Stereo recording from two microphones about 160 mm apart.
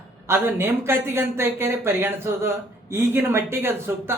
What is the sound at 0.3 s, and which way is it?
Speech, 15° right (ahead or behind).